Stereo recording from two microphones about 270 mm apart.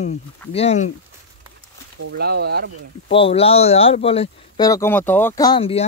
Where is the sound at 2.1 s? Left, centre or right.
Right.